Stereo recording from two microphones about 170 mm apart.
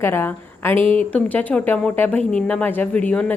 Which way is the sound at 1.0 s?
10° left (ahead or behind).